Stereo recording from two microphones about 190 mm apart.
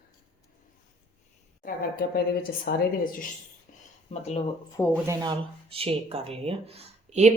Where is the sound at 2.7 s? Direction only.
45° left (ahead or behind).